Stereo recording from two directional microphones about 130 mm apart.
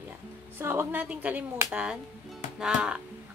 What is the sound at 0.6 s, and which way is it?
Speech, 15° right (ahead or behind).